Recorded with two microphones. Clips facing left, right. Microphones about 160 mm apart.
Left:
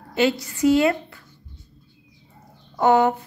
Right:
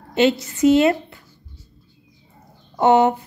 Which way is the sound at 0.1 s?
20° right (ahead or behind).